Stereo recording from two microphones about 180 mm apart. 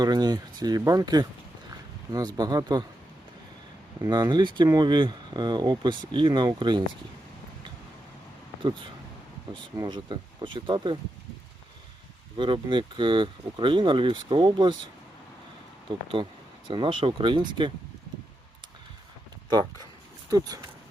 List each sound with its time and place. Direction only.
0.0 s speech: 25° right (ahead or behind)
4.0 s speech: 25° right (ahead or behind)
8.6 s speech: 25° right (ahead or behind)
12.4 s speech: 25° right (ahead or behind)
15.9 s speech: 25° right (ahead or behind)
19.5 s speech: 25° right (ahead or behind)